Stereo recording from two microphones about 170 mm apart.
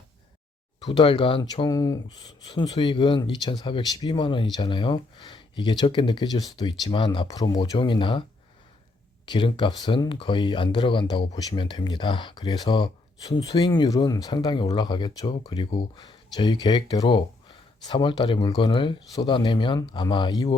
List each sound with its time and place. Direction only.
0.9 s speech: 30° left (ahead or behind)
9.2 s speech: 30° left (ahead or behind)